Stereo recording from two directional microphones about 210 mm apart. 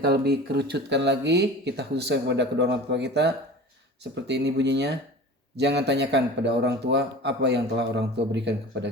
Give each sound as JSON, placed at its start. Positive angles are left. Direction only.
{"t": 0.0, "sound": "a man's voice", "side_deg": -50}